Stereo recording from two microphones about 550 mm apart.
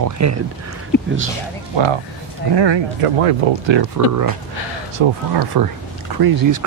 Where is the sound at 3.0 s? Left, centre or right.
Right.